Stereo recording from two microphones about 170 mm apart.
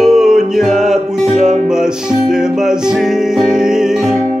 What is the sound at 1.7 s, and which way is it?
Music, 5° right (ahead or behind).